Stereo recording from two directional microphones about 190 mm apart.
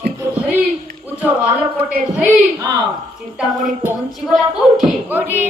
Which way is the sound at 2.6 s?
20° right (ahead or behind).